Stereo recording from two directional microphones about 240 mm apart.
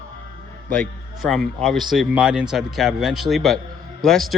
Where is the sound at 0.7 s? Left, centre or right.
Centre.